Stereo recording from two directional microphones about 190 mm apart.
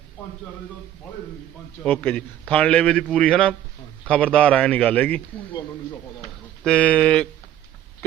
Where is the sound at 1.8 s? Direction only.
5° left (ahead or behind).